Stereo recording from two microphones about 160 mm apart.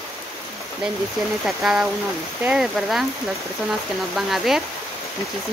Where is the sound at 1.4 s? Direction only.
5° right (ahead or behind).